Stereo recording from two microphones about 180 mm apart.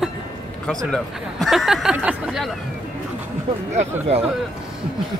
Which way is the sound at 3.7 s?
35° right (ahead or behind).